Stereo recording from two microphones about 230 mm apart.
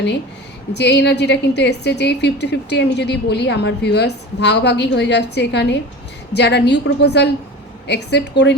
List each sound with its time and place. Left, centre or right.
0.8 s a woman's voice: left